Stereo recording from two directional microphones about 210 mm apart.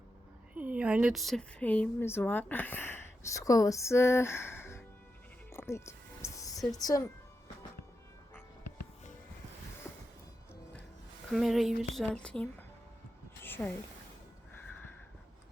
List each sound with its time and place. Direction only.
0.5 s speech: 5° right (ahead or behind); by 4.8 s 10° left (ahead or behind)
5.5 s music: 15° left (ahead or behind)
6.7 s speech: 15° left (ahead or behind)
11.3 s a woman's voice: centre (ahead or behind)
13.4 s a sound: 10° left (ahead or behind)